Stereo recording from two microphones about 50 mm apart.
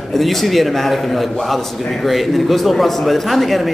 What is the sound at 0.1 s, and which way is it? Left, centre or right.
A man's voice, centre.